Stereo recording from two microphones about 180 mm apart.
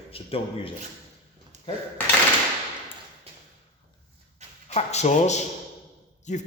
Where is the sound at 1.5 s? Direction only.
40° right (ahead or behind).